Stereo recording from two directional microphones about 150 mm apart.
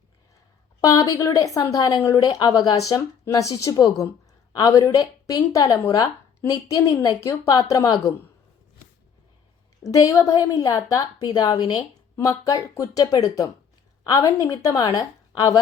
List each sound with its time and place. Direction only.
0.8 s a woman's voice: 25° left (ahead or behind)
9.8 s a woman's voice: 25° left (ahead or behind)